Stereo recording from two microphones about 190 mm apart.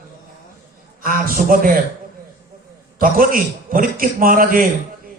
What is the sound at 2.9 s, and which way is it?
A man's voice, 50° right (ahead or behind).